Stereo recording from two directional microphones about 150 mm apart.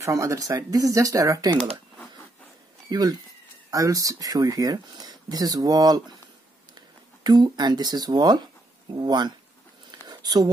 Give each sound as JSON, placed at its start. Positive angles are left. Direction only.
{"t": 0.0, "sound": "speech", "side_deg": -20}
{"t": 2.9, "sound": "speech", "side_deg": -25}
{"t": 7.2, "sound": "speech", "side_deg": -30}
{"t": 9.8, "sound": "a sound", "side_deg": -30}